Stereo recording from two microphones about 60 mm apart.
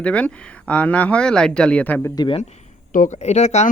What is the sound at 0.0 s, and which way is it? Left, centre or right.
Speech, left.